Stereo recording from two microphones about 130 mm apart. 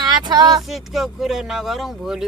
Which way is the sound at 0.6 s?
Centre (ahead or behind).